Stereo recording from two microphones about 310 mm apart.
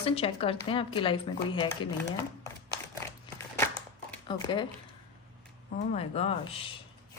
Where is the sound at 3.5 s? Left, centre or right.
Centre.